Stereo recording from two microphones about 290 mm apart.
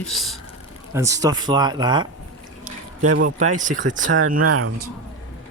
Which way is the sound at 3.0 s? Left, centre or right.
Right.